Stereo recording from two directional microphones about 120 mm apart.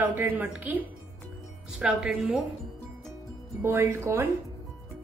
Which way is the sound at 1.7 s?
5° right (ahead or behind).